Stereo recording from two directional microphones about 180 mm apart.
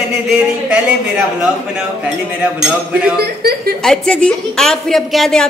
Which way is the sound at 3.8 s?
5° left (ahead or behind).